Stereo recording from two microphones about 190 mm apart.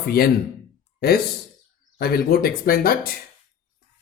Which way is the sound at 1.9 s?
55° left (ahead or behind).